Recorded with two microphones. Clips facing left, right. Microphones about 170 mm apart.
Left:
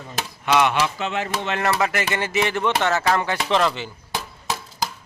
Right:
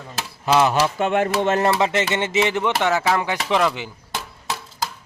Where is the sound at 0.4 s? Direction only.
35° right (ahead or behind).